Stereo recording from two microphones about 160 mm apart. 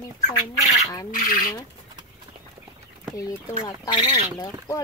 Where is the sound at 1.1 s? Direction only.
60° left (ahead or behind).